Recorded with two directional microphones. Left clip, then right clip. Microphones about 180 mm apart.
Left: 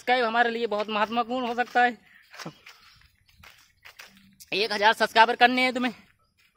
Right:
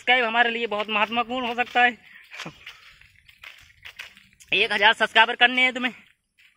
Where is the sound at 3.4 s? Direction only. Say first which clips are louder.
Right 8 dB; 55° left (ahead or behind).